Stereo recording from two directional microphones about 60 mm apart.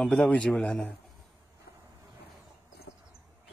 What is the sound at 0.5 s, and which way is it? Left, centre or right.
Speech, centre.